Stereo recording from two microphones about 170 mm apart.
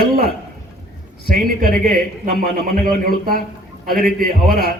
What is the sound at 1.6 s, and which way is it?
A man's voice, 60° right (ahead or behind).